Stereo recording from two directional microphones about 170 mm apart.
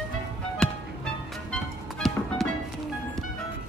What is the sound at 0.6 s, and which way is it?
Music, 5° left (ahead or behind).